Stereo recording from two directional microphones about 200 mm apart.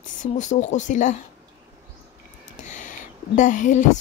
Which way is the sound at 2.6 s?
35° left (ahead or behind).